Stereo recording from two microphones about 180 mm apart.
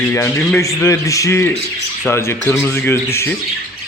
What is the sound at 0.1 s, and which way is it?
A man's voice, 15° left (ahead or behind).